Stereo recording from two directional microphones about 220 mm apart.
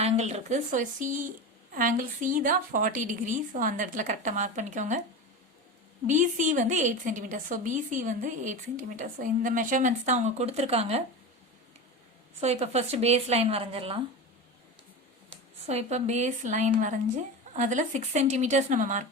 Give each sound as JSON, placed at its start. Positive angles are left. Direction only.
{"t": 0.0, "sound": "a woman's voice", "side_deg": -30}
{"t": 6.1, "sound": "a woman's voice", "side_deg": -35}
{"t": 12.4, "sound": "speech", "side_deg": -30}
{"t": 15.6, "sound": "a woman's voice", "side_deg": -30}